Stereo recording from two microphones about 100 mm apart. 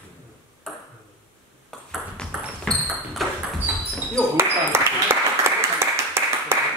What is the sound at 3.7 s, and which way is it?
Basketball bounce, 20° right (ahead or behind).